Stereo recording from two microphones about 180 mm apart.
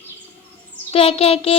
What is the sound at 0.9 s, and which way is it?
Speech, 30° left (ahead or behind).